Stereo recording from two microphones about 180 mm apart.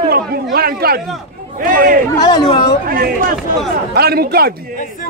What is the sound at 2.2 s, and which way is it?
Speech, 25° left (ahead or behind).